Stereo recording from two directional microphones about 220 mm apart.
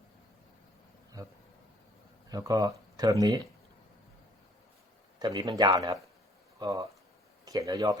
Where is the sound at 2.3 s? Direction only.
15° right (ahead or behind).